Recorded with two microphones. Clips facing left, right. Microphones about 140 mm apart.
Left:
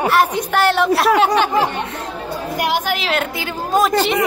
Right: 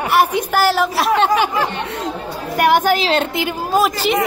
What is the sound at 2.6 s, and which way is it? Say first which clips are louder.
Speech: right 7 dB; 55° right (ahead or behind).